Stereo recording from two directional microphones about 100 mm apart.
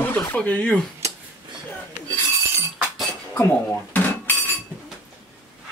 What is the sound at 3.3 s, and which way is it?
Dishes, 20° left (ahead or behind).